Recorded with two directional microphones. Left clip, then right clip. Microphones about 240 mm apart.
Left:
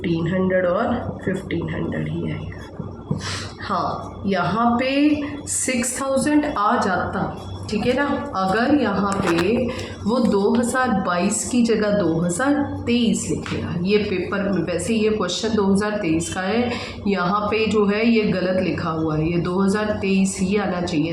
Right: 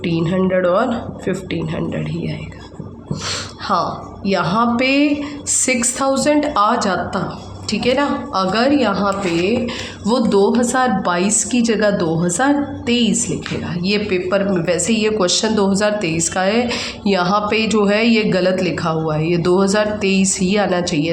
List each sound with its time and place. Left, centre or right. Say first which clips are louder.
0.0 s speech: right 4 dB; right
4.3 s speech: right 3 dB; right